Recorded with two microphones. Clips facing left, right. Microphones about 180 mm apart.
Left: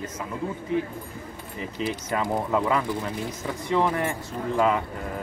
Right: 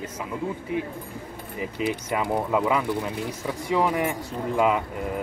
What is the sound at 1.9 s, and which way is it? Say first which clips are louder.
Speech: even; 10° right (ahead or behind).